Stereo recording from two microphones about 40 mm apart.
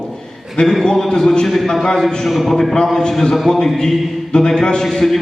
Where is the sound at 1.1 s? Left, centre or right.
Centre.